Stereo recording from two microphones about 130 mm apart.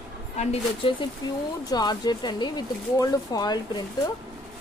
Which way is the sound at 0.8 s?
40° left (ahead or behind).